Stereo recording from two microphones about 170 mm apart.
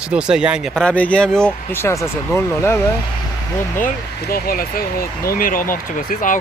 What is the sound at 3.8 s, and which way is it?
Speech, 60° left (ahead or behind).